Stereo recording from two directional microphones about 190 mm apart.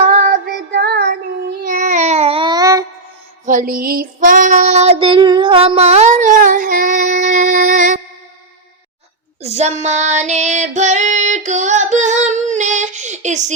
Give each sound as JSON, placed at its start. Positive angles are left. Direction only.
{"t": 0.3, "sound": "child singing", "side_deg": -60}
{"t": 3.4, "sound": "child singing", "side_deg": -45}
{"t": 9.4, "sound": "child singing", "side_deg": -35}
{"t": 10.8, "sound": "female singing", "side_deg": -40}